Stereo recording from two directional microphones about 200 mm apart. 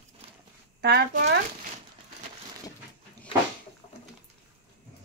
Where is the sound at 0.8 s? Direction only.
55° right (ahead or behind).